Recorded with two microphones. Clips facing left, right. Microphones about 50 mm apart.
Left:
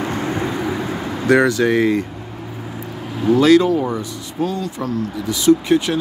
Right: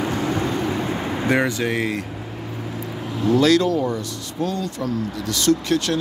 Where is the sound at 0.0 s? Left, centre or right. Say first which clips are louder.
Left 1 dB; left.